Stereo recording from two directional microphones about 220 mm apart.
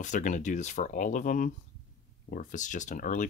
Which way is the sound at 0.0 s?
35° left (ahead or behind).